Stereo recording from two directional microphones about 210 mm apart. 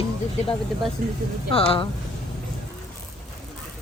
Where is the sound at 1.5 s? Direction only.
25° left (ahead or behind).